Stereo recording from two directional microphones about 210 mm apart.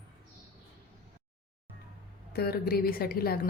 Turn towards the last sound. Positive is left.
turn(degrees=45)  # may be behind; listen again after turning